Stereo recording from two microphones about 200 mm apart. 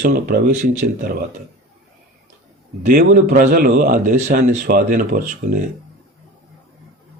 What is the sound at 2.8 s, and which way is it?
A man's voice, 45° right (ahead or behind).